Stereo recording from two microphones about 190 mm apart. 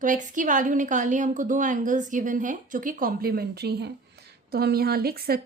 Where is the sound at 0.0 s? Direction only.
40° right (ahead or behind).